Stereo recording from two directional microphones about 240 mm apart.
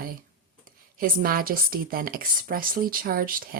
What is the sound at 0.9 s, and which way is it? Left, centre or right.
Speech, right.